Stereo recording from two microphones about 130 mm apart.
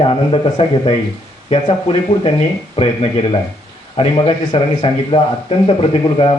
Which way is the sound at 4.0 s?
40° left (ahead or behind).